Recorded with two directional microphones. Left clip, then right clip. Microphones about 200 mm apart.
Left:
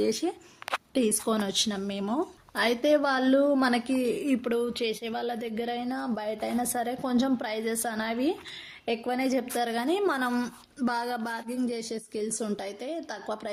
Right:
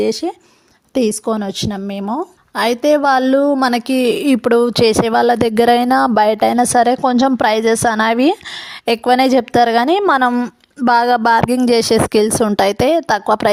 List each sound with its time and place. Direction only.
0.0 s a woman's voice: 35° right (ahead or behind)